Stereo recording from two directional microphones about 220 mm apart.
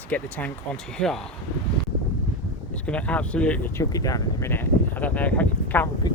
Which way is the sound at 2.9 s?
5° left (ahead or behind).